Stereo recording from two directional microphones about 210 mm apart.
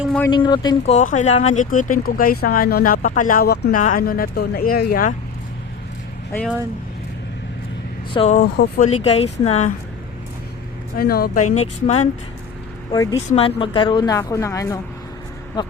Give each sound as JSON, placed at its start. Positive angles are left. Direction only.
{"t": 0.0, "sound": "a sound", "side_deg": 0}
{"t": 0.3, "sound": "speech", "side_deg": 20}
{"t": 0.9, "sound": "speech", "side_deg": 35}
{"t": 8.1, "sound": "speech", "side_deg": 25}
{"t": 8.4, "sound": "speech", "side_deg": 45}
{"t": 8.9, "sound": "speech", "side_deg": 30}
{"t": 10.9, "sound": "speech", "side_deg": 45}
{"t": 11.5, "sound": "speech", "side_deg": 30}
{"t": 12.9, "sound": "a woman's voice", "side_deg": 20}